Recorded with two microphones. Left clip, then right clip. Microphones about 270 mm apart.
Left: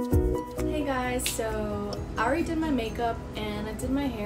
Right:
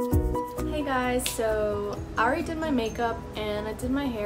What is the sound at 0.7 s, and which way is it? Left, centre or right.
Music, centre.